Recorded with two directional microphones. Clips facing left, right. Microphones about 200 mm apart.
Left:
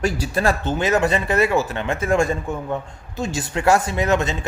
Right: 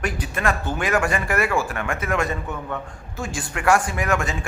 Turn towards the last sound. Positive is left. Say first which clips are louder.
# left 4 dB
turn(degrees=25)  # may be behind; listen again after turning